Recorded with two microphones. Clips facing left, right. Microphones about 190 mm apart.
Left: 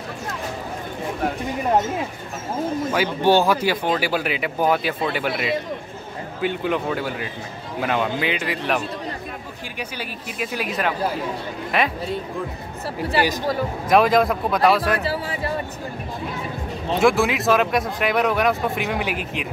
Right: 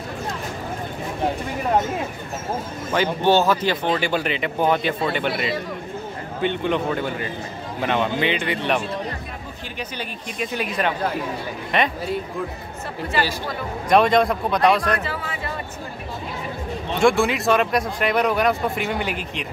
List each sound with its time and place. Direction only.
2.9 s speech: 10° left (ahead or behind)
13.8 s speech: centre (ahead or behind)
15.0 s speech: 35° left (ahead or behind)
17.0 s speech: centre (ahead or behind)